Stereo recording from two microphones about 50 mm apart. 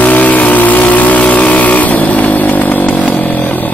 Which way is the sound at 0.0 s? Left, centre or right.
Left.